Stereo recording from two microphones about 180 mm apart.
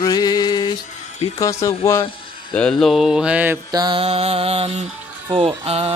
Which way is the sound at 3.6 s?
25° right (ahead or behind).